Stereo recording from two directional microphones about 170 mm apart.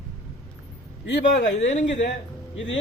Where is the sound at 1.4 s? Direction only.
45° left (ahead or behind).